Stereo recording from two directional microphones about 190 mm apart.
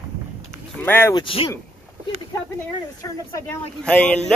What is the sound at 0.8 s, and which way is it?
Speech, 10° left (ahead or behind).